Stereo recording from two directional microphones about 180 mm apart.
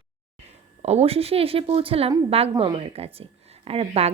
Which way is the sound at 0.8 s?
35° right (ahead or behind).